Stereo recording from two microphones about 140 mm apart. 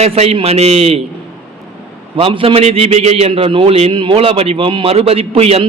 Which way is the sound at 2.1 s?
40° right (ahead or behind).